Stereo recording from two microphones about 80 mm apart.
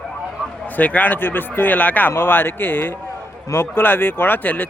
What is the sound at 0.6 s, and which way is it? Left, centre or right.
A man's voice, centre.